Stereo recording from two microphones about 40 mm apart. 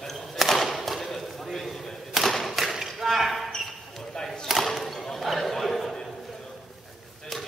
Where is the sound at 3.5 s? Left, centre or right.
Centre.